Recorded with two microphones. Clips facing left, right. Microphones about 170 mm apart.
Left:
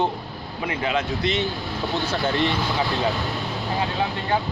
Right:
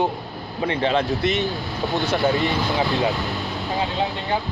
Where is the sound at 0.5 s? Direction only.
30° right (ahead or behind).